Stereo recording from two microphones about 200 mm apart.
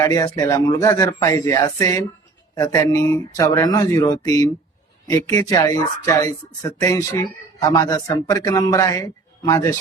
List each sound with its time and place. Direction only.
0.0 s speech: 15° left (ahead or behind)